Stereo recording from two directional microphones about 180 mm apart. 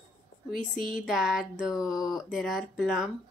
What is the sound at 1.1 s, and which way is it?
Speech, 5° right (ahead or behind).